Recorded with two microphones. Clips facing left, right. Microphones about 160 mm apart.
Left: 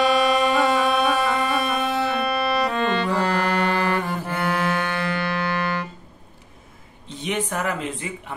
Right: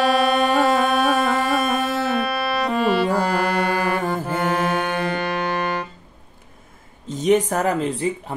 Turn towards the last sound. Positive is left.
turn(degrees=-40)  # may be behind; listen again after turning